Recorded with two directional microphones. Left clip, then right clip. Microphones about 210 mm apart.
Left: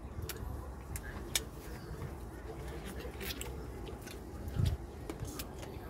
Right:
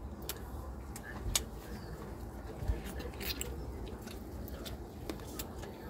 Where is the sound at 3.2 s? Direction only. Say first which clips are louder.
Right 3 dB; 20° right (ahead or behind).